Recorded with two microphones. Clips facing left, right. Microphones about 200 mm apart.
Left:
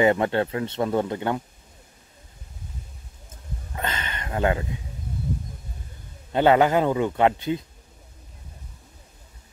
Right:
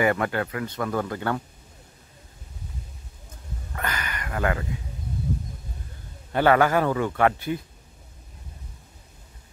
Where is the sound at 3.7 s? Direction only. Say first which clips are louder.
Left 1 dB; 25° left (ahead or behind).